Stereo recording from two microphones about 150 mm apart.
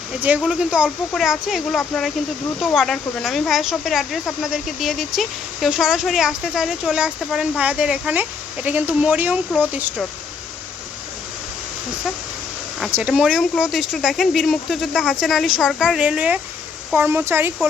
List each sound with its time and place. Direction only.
0.2 s speech: 10° right (ahead or behind)
12.8 s speech: 5° right (ahead or behind)